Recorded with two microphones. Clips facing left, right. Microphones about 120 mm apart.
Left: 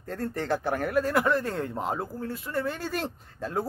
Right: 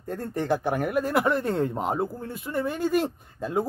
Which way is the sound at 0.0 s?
15° right (ahead or behind).